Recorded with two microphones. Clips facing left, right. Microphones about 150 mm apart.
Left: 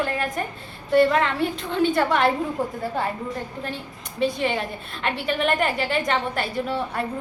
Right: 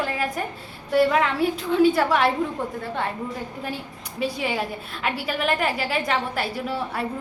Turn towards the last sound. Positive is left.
turn(degrees=-5)  # may be behind; listen again after turning